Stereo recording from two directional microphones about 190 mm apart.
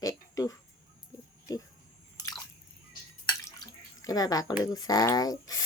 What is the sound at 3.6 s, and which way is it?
Drip, 20° left (ahead or behind).